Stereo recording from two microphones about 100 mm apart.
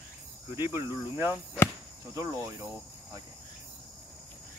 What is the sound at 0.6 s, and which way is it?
Cricket, 25° right (ahead or behind).